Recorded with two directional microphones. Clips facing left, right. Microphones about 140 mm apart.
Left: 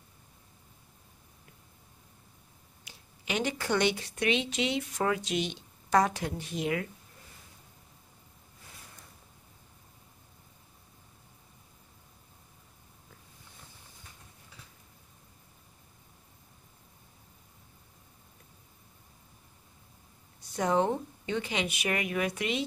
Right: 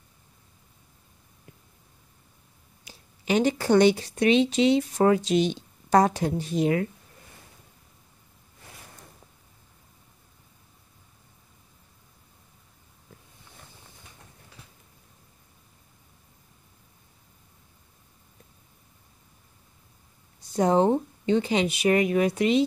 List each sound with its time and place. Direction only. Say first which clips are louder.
2.8 s speech: right 5 dB; 35° right (ahead or behind)
20.5 s speech: right 7 dB; 30° right (ahead or behind)